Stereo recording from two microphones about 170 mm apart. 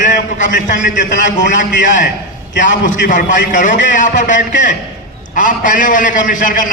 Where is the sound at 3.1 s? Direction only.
50° left (ahead or behind).